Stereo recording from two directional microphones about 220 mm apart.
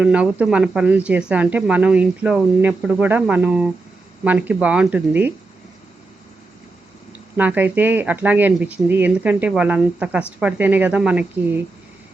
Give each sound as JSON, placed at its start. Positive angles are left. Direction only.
{"t": 0.0, "sound": "speech", "side_deg": -5}
{"t": 7.3, "sound": "speech", "side_deg": -5}